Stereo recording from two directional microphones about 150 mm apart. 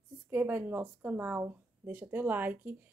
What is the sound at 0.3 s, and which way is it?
Speech, 15° right (ahead or behind).